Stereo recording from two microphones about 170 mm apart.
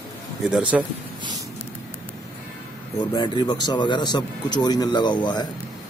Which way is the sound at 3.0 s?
25° left (ahead or behind).